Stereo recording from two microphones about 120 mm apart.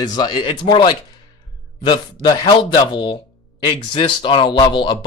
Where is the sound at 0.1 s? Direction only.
40° left (ahead or behind).